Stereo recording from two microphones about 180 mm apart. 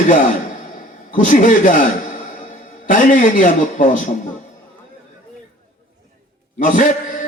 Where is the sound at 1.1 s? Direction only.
45° left (ahead or behind).